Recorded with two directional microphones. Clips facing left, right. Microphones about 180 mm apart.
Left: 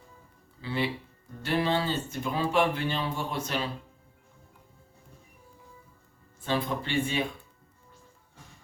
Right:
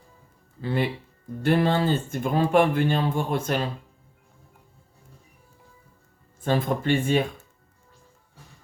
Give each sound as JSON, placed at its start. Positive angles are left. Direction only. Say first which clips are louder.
{"t": 0.6, "sound": "speech", "louder": "right 5 dB", "side_deg": -50}
{"t": 6.4, "sound": "speech", "louder": "right 6 dB", "side_deg": -50}